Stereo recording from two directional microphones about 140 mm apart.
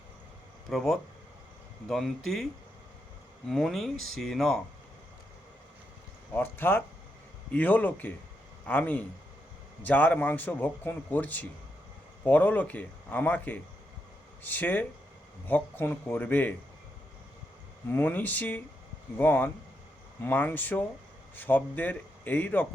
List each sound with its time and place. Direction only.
0.7 s speech: 5° left (ahead or behind)
1.9 s speech: centre (ahead or behind)
3.5 s speech: 5° left (ahead or behind)
6.3 s a man's voice: 15° left (ahead or behind)
17.9 s a man's voice: 15° left (ahead or behind)